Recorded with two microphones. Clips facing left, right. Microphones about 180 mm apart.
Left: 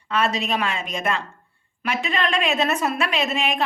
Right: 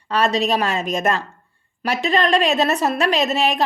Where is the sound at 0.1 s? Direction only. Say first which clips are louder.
Right 4 dB; 35° right (ahead or behind).